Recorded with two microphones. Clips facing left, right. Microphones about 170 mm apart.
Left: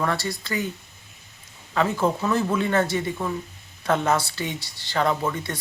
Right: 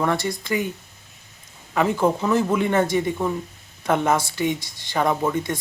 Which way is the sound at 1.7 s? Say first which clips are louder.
Right 3 dB; 15° right (ahead or behind).